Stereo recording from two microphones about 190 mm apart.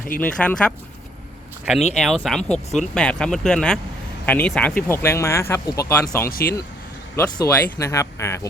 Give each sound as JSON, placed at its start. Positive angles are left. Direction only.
{"t": 0.2, "sound": "speech", "side_deg": 5}
{"t": 1.9, "sound": "speech", "side_deg": 0}
{"t": 2.4, "sound": "speech", "side_deg": 35}
{"t": 2.7, "sound": "speech", "side_deg": 5}
{"t": 6.2, "sound": "speech", "side_deg": 50}
{"t": 7.2, "sound": "speech", "side_deg": 20}